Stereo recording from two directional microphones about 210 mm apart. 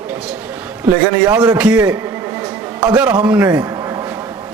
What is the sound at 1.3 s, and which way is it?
A man's voice, 15° right (ahead or behind).